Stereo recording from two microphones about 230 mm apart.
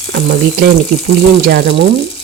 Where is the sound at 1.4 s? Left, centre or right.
Right.